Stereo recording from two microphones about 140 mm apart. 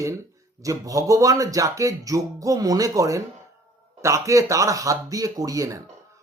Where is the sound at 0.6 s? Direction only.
25° right (ahead or behind).